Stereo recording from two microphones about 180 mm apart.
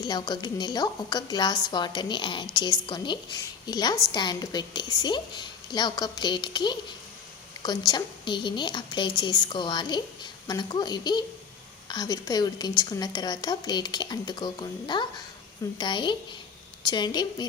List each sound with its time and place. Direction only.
0.0 s a woman's voice: 25° left (ahead or behind)